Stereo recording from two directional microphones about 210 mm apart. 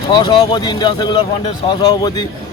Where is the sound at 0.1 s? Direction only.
20° left (ahead or behind).